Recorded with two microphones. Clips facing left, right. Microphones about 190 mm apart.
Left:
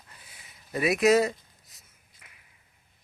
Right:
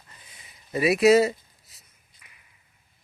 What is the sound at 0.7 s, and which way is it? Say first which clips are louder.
Speech: right 4 dB; centre (ahead or behind).